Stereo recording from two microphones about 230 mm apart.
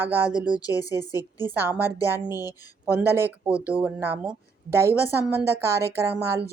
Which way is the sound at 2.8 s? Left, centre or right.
Centre.